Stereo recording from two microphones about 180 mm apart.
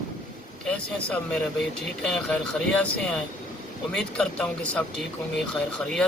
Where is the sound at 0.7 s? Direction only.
5° left (ahead or behind).